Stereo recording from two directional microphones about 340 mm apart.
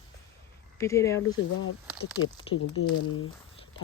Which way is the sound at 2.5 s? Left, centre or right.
Left.